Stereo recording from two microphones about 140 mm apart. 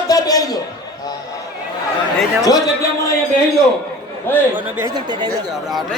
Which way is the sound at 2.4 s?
25° left (ahead or behind).